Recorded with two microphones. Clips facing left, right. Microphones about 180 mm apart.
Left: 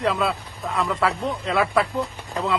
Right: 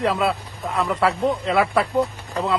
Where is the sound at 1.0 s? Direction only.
30° right (ahead or behind).